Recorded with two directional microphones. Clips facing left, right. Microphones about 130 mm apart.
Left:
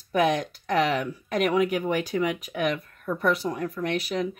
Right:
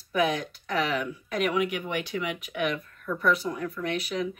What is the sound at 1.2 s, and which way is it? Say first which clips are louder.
Speech: left 4 dB; 40° left (ahead or behind).